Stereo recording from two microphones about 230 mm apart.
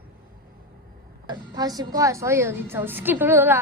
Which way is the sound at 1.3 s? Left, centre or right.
Centre.